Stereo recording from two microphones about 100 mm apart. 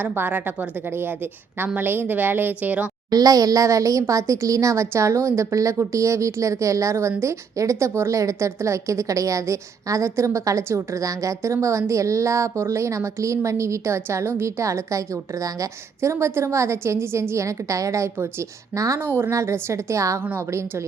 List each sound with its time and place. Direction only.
0.0 s a woman's voice: 20° right (ahead or behind)
3.1 s a woman's voice: 40° right (ahead or behind)